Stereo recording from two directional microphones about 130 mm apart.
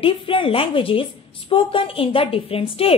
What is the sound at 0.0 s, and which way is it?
A woman's voice, 40° left (ahead or behind).